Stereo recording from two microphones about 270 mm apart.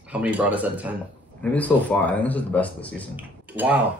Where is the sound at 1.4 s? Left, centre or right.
Centre.